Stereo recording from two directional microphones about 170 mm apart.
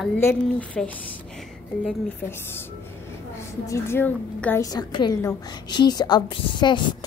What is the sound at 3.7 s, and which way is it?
Speech, 15° left (ahead or behind).